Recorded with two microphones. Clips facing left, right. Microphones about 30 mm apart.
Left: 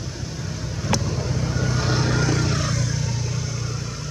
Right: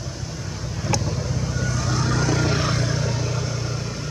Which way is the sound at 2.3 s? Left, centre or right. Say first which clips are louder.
Right 2 dB; centre.